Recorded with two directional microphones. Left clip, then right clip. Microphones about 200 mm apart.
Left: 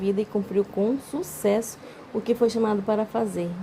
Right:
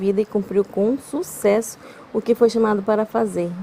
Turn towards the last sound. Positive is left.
turn(degrees=-35)  # may be behind; listen again after turning